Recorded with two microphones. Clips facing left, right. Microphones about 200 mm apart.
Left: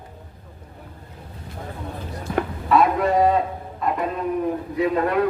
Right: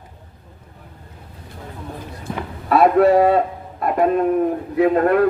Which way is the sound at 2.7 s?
55° right (ahead or behind).